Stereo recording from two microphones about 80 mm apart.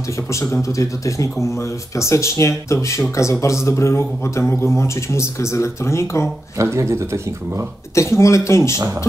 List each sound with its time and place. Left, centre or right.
0.3 s speech: left
6.6 s speech: right
7.9 s speech: left